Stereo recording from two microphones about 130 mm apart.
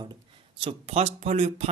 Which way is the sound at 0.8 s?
55° right (ahead or behind).